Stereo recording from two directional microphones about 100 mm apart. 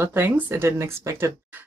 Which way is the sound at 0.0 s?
25° right (ahead or behind).